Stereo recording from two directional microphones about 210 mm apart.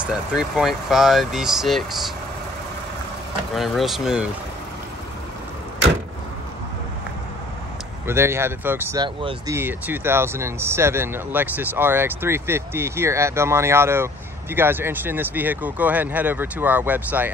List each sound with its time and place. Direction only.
0.0 s speech: 5° right (ahead or behind)
3.5 s speech: centre (ahead or behind)
8.1 s speech: 10° right (ahead or behind)
9.0 s speech: 20° right (ahead or behind)
9.6 s speech: 10° right (ahead or behind)